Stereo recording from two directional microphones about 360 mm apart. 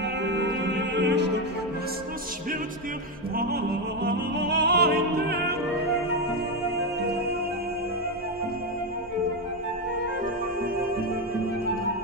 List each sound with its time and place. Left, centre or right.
0.2 s music: right
4.0 s music: right
7.0 s music: right